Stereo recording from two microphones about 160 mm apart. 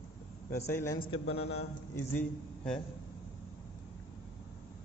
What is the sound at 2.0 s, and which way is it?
Speech, 10° left (ahead or behind).